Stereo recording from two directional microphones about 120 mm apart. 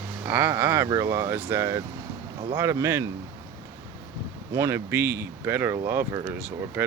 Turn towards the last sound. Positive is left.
turn(degrees=-10)  # may be behind; listen again after turning